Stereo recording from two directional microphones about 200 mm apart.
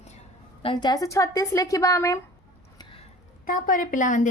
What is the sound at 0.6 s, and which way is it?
A woman's voice, 25° left (ahead or behind).